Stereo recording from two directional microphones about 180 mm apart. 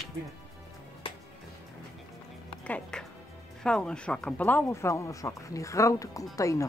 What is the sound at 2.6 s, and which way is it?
Speech, 5° left (ahead or behind).